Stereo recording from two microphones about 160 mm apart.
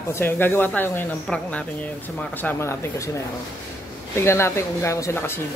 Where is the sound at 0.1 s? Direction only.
15° left (ahead or behind).